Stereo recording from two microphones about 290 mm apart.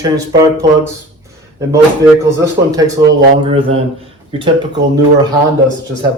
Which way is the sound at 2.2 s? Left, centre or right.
Centre.